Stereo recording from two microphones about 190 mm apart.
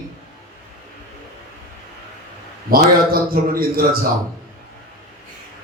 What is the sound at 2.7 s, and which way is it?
Speech, 50° right (ahead or behind).